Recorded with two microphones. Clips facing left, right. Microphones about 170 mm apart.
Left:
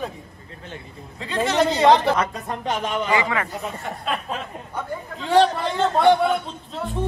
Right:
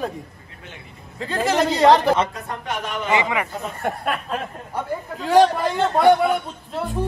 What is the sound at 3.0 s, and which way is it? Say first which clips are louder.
Speech: right 4 dB; 20° right (ahead or behind).